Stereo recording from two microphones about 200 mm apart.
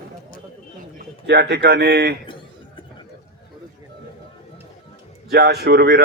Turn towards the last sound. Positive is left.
turn(degrees=-55)  # may be behind; listen again after turning